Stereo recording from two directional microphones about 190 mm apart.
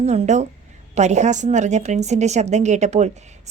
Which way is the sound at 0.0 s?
35° right (ahead or behind).